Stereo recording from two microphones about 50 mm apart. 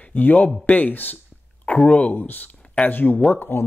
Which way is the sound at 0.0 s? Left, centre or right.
Left.